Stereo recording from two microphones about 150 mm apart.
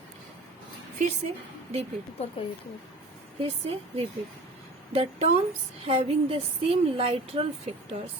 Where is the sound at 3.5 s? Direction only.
40° right (ahead or behind).